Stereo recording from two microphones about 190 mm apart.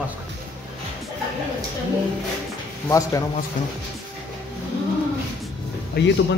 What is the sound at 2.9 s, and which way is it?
Speech, 15° left (ahead or behind).